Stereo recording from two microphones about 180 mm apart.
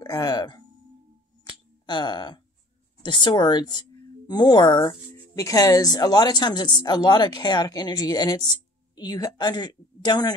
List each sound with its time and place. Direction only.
0.0 s speech: 20° left (ahead or behind)
1.9 s speech: 25° left (ahead or behind)